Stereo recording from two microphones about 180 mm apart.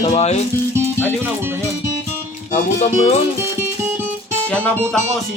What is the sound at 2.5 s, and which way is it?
Speech, 40° left (ahead or behind).